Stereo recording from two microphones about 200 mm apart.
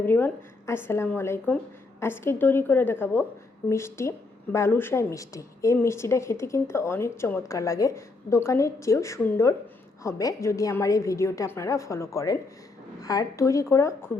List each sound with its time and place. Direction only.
0.0 s a woman's voice: 10° left (ahead or behind)